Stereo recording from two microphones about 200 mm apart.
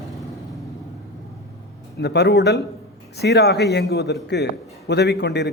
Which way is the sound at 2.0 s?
55° left (ahead or behind).